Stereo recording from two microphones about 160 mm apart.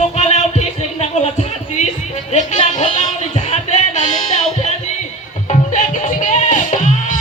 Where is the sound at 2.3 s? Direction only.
45° left (ahead or behind).